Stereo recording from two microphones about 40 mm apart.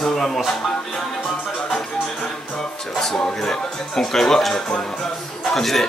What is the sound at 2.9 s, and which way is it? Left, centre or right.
Speech, centre.